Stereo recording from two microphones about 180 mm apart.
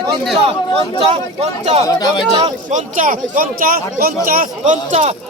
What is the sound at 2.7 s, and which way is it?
Speech, 50° right (ahead or behind).